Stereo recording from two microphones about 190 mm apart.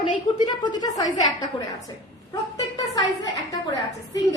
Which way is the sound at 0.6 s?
20° left (ahead or behind).